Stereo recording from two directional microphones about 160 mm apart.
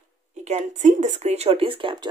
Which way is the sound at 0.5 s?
45° right (ahead or behind).